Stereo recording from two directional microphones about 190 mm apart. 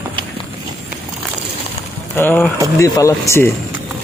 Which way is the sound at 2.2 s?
10° left (ahead or behind).